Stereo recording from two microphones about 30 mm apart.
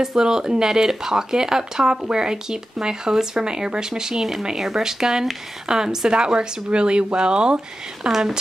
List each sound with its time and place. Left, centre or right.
0.0 s speech: right